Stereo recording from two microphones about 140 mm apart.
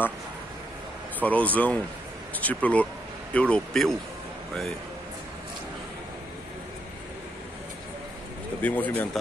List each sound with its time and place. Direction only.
1.2 s speech: 10° left (ahead or behind)
8.5 s speech: 10° left (ahead or behind)